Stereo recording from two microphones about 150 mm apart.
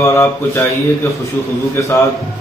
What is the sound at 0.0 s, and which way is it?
Speech, 20° left (ahead or behind).